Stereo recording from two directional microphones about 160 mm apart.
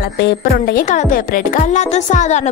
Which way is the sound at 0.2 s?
90° left.